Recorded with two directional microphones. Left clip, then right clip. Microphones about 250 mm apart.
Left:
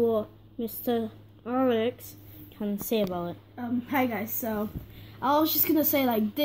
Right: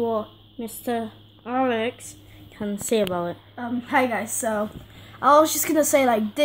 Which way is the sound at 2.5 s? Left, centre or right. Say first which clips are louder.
Right 5 dB; centre.